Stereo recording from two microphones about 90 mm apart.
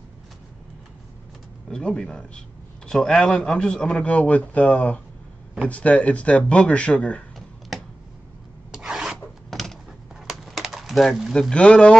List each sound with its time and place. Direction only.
1.7 s a man's voice: 10° left (ahead or behind)
8.7 s filing: 5° right (ahead or behind)
10.2 s a sound: centre (ahead or behind)
11.5 s a man's voice: 10° left (ahead or behind)